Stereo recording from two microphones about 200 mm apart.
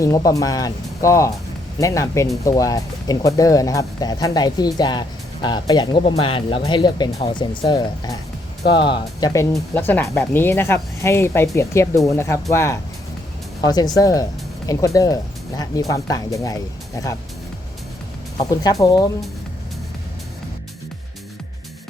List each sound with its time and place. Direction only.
0.0 s speech: 15° left (ahead or behind)
18.3 s speech: 20° left (ahead or behind)